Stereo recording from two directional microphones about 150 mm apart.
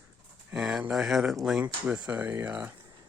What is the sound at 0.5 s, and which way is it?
Speech, 5° right (ahead or behind).